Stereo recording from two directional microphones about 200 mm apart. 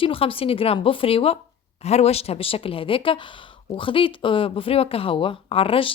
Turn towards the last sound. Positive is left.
turn(degrees=25)  # may be behind; listen again after turning